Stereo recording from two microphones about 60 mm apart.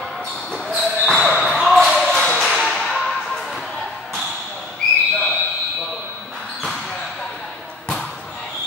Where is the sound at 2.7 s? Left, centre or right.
Centre.